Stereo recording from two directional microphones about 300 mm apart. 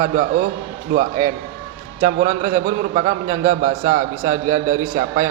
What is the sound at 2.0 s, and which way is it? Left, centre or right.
A man's voice, right.